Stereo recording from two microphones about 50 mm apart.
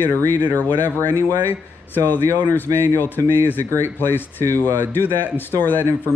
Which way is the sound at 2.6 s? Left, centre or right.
Right.